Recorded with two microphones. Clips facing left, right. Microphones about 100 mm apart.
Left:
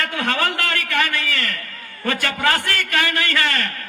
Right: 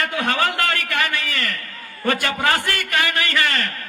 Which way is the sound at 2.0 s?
20° right (ahead or behind).